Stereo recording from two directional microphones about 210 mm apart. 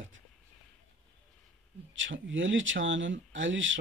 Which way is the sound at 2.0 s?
65° right (ahead or behind).